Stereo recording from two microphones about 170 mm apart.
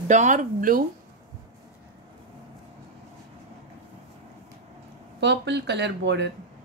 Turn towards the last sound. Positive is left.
turn(degrees=-90)